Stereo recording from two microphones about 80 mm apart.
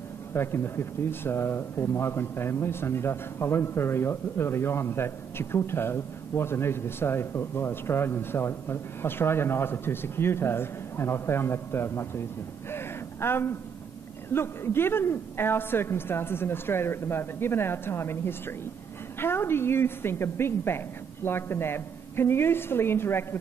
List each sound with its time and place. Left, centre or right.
0.3 s speech: left
12.7 s a sound: left
14.3 s a woman's voice: left